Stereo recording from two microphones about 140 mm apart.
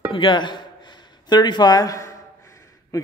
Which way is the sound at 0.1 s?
35° left (ahead or behind).